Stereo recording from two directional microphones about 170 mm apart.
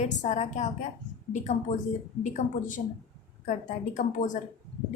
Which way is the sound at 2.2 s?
50° left (ahead or behind).